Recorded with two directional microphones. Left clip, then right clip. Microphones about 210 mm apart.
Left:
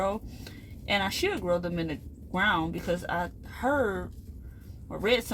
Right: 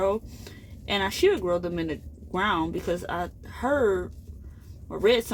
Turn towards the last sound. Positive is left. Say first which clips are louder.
# right 4 dB
turn(degrees=-20)  # may be behind; listen again after turning